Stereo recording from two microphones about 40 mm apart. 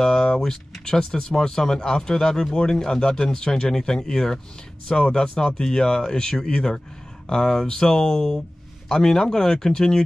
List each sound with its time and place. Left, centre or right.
0.0 s speech: centre